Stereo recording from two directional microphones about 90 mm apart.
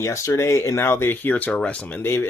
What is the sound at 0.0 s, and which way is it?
Speech, 35° left (ahead or behind).